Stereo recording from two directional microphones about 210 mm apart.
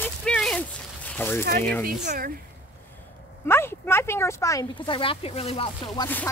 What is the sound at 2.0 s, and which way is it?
Speech, 45° right (ahead or behind).